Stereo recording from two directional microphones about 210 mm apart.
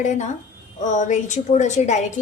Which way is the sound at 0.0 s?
35° left (ahead or behind).